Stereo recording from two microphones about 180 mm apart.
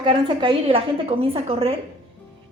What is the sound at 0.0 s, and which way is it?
A woman's voice, 25° right (ahead or behind).